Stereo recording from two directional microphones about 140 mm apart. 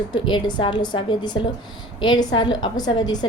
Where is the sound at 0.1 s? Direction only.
35° left (ahead or behind).